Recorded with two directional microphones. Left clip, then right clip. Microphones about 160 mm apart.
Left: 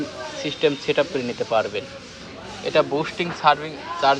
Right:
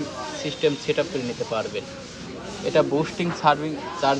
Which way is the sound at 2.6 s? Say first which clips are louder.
Left 1 dB; 15° right (ahead or behind).